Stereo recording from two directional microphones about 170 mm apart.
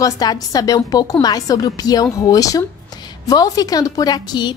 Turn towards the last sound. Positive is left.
turn(degrees=25)  # may be behind; listen again after turning